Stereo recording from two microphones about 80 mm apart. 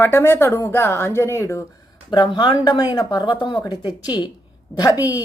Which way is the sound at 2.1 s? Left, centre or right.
Left.